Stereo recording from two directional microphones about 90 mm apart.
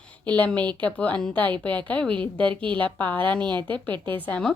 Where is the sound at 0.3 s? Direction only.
15° left (ahead or behind).